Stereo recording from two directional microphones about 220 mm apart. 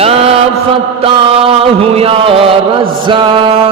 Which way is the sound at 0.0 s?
25° right (ahead or behind).